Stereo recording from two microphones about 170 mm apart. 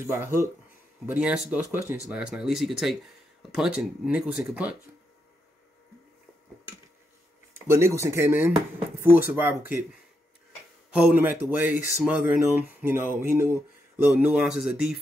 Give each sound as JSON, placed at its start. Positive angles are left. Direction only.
{"t": 0.0, "sound": "speech", "side_deg": -15}
{"t": 7.5, "sound": "speech", "side_deg": -15}
{"t": 10.9, "sound": "speech", "side_deg": -10}